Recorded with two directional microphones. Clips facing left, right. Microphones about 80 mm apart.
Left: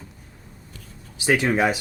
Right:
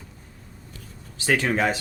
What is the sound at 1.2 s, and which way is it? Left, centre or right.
Speech, centre.